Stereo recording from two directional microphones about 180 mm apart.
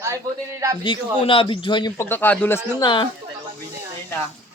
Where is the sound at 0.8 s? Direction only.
30° left (ahead or behind).